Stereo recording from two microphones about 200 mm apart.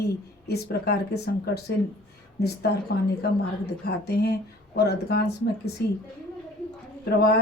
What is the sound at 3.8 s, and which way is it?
Speech, 55° left (ahead or behind).